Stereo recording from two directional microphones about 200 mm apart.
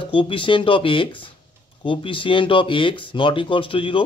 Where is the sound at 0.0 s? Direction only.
25° left (ahead or behind).